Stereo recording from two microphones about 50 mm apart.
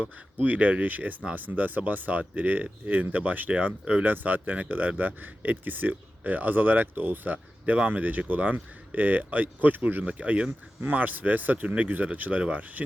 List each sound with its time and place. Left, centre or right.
0.3 s speech: right